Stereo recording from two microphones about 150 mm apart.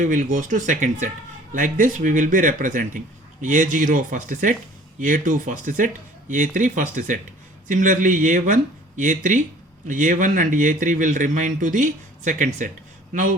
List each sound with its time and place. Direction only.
0.0 s a man's voice: 60° right (ahead or behind)